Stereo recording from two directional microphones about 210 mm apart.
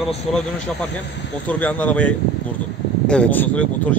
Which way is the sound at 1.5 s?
5° left (ahead or behind).